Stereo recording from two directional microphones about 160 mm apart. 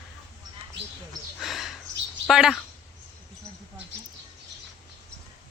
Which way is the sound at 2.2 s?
Centre (ahead or behind).